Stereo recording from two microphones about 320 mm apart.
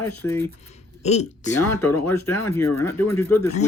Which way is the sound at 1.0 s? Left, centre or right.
Left.